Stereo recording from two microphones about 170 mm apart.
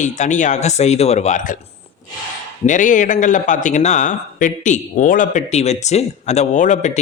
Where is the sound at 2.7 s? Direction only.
50° left (ahead or behind).